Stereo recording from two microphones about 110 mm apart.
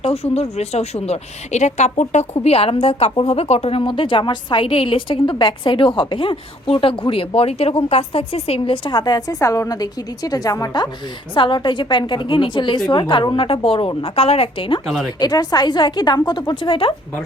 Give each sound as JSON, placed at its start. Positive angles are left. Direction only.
{"t": 0.0, "sound": "speech", "side_deg": 65}
{"t": 11.3, "sound": "speech", "side_deg": 50}
{"t": 14.8, "sound": "speech", "side_deg": 0}
{"t": 15.2, "sound": "a woman's voice", "side_deg": 40}